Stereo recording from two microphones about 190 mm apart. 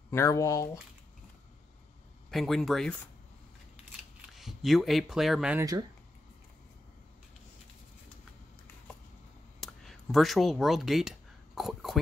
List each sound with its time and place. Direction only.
0.1 s speech: 15° left (ahead or behind)
2.3 s speech: centre (ahead or behind)
4.3 s speech: centre (ahead or behind)
5.6 s speech: 20° right (ahead or behind)
9.6 s a sound: centre (ahead or behind)